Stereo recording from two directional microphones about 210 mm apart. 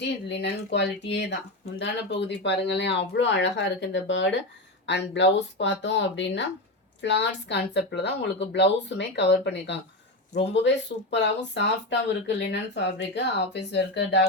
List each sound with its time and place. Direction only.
0.0 s a woman's voice: 55° left (ahead or behind)